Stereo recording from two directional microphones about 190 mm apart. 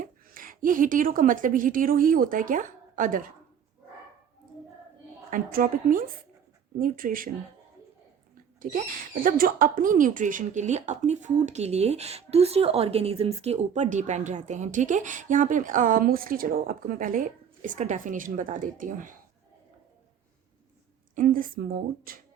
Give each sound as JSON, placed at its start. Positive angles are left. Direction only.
{"t": 0.0, "sound": "a woman's voice", "side_deg": -45}
{"t": 5.3, "sound": "speech", "side_deg": -50}
{"t": 8.6, "sound": "speech", "side_deg": -45}
{"t": 21.2, "sound": "speech", "side_deg": -45}